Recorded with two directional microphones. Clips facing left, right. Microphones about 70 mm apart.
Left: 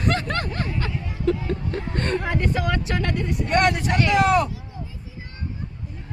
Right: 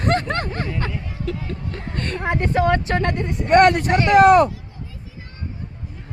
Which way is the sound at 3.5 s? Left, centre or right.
Right.